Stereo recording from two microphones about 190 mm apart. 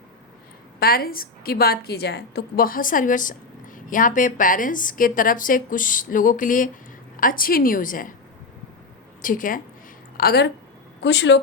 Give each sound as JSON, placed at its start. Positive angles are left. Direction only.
{"t": 0.8, "sound": "a woman's voice", "side_deg": 50}
{"t": 9.2, "sound": "a woman's voice", "side_deg": 45}
{"t": 10.2, "sound": "a woman's voice", "side_deg": 55}
{"t": 11.0, "sound": "speech", "side_deg": 70}